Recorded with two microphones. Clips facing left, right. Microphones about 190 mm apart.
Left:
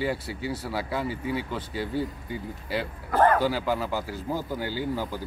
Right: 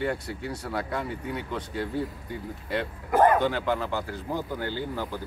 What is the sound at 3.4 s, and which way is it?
Speech, 5° left (ahead or behind).